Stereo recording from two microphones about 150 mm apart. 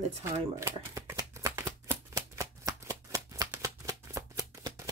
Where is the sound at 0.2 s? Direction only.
20° right (ahead or behind).